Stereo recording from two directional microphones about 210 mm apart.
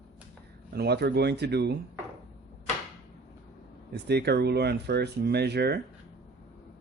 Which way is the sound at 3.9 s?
50° right (ahead or behind).